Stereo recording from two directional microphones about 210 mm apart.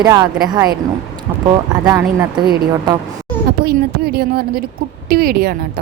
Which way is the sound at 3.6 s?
50° right (ahead or behind).